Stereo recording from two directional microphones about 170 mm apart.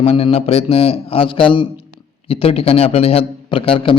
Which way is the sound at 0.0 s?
35° left (ahead or behind).